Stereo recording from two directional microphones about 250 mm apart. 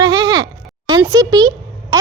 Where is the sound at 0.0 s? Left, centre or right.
Centre.